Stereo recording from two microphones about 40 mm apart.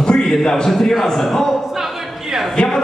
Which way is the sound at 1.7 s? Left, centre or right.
Centre.